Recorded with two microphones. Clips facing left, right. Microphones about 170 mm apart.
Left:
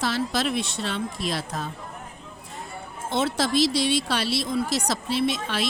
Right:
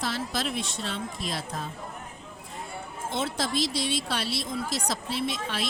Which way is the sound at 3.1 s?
75° left (ahead or behind).